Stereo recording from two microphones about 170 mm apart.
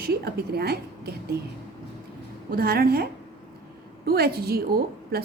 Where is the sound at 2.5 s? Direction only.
65° right (ahead or behind).